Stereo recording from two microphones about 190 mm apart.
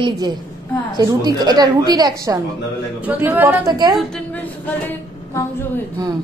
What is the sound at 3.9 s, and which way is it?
Speech, 5° left (ahead or behind).